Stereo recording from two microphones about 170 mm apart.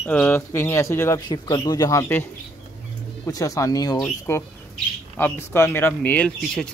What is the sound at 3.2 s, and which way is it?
Speech, 20° left (ahead or behind).